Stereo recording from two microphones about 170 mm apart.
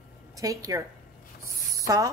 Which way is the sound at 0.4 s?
20° right (ahead or behind).